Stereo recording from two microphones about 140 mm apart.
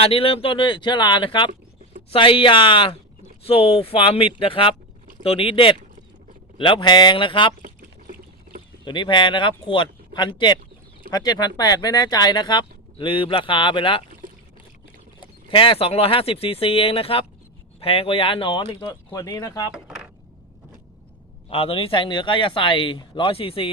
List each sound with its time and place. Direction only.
0.0 s speech: 45° left (ahead or behind)
7.6 s a sound: 80° right
8.8 s speech: 35° left (ahead or behind)
14.2 s a sound: 75° right (ahead or behind)
15.2 s speech: 40° left (ahead or behind)
19.7 s speech: 5° right (ahead or behind)
21.5 s speech: 40° left (ahead or behind)